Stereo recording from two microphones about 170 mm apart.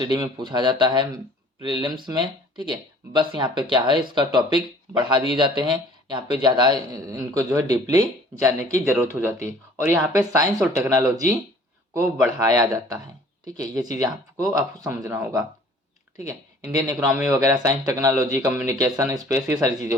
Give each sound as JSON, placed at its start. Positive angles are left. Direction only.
{"t": 0.0, "sound": "a man's voice", "side_deg": -25}
{"t": 6.1, "sound": "a man's voice", "side_deg": -25}
{"t": 16.7, "sound": "a man's voice", "side_deg": -20}